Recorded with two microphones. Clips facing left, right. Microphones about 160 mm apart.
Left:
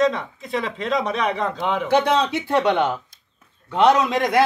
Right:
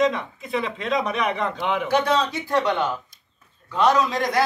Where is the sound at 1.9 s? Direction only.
25° left (ahead or behind).